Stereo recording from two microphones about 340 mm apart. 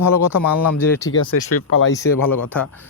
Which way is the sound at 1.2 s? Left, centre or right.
Left.